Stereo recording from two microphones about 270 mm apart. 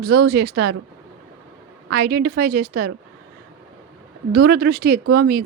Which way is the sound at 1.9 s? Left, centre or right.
Right.